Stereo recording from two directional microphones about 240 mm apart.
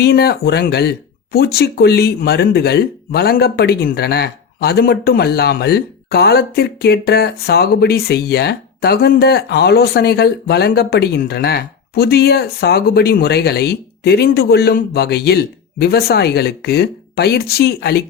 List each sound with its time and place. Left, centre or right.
0.0 s speech: left